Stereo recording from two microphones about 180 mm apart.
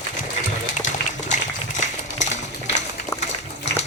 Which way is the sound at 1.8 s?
40° left (ahead or behind).